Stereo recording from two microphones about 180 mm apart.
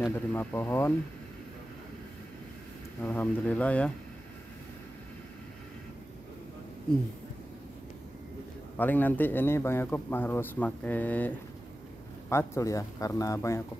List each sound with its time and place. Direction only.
0.3 s a man's voice: 10° left (ahead or behind)
3.0 s a man's voice: 10° left (ahead or behind)
8.7 s a man's voice: 10° left (ahead or behind)